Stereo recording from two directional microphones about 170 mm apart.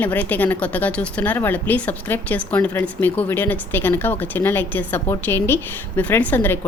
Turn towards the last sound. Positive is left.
turn(degrees=10)  # may be behind; listen again after turning